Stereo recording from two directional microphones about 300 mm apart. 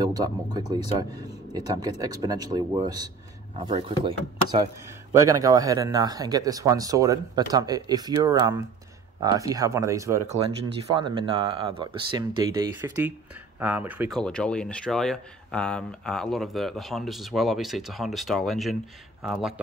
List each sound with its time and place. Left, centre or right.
0.0 s speech: centre
5.1 s speech: centre